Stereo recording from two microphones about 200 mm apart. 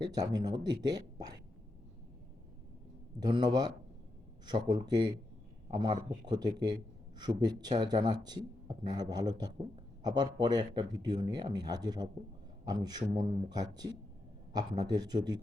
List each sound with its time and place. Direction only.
0.0 s speech: 20° right (ahead or behind)
3.2 s speech: 20° right (ahead or behind)